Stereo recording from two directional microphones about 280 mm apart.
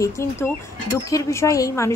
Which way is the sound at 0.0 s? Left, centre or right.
Centre.